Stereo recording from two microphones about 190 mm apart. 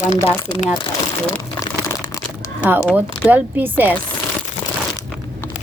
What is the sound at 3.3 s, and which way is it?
Speech, 10° right (ahead or behind).